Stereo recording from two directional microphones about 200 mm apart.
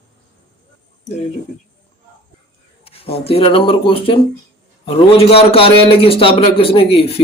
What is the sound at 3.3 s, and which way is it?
A man's voice, 30° left (ahead or behind).